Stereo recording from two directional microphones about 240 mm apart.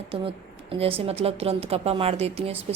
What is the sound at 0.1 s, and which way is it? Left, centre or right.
A woman's voice, right.